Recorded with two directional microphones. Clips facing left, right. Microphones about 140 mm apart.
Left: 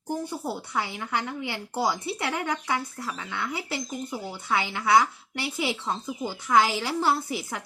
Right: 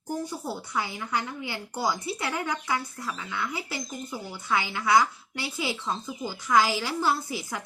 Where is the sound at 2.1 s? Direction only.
65° left (ahead or behind).